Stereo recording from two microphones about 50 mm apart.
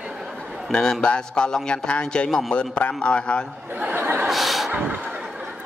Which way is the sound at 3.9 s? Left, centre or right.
Right.